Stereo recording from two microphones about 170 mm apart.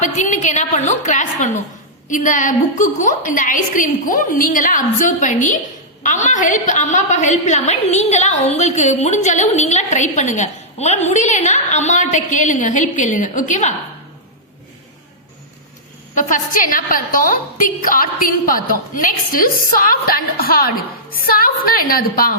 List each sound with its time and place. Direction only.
0.0 s a woman's voice: 45° left (ahead or behind)
16.1 s a woman's voice: 50° left (ahead or behind)